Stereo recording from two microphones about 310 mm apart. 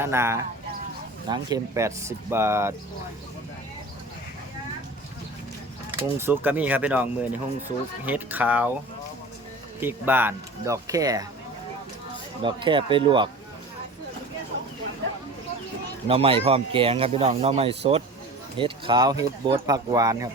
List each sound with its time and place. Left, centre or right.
0.0 s speech: centre
6.0 s speech: centre
9.8 s speech: centre
12.4 s speech: centre
16.0 s speech: centre